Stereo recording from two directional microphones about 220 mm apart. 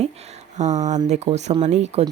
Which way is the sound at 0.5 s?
30° right (ahead or behind).